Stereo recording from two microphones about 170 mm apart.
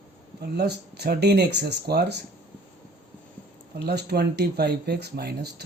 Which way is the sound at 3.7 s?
70° right (ahead or behind).